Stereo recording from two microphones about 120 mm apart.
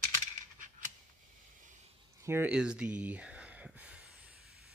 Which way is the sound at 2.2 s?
20° right (ahead or behind).